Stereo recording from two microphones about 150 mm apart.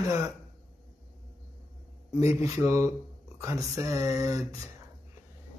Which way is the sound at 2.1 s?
20° right (ahead or behind).